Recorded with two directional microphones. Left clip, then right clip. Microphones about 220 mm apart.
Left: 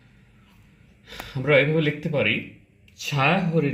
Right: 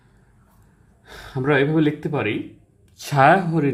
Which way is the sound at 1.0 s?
40° right (ahead or behind).